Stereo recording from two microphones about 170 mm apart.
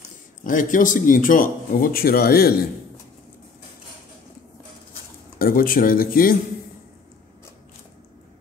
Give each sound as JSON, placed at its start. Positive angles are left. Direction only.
{"t": 0.4, "sound": "speech", "side_deg": 50}
{"t": 5.4, "sound": "speech", "side_deg": 60}